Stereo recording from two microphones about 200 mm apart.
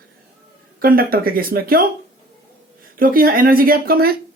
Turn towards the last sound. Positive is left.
turn(degrees=-50)  # may be behind; listen again after turning